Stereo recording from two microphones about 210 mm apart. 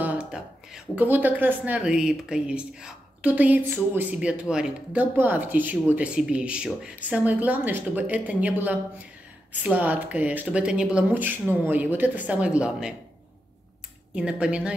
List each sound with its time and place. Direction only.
0.0 s speech: 5° right (ahead or behind)
14.1 s speech: 5° right (ahead or behind)